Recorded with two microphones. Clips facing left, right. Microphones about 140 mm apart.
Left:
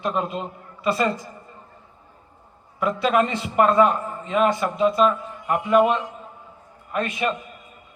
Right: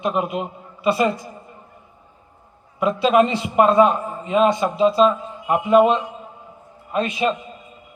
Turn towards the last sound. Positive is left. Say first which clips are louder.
# right 4 dB
turn(degrees=-20)  # may be behind; listen again after turning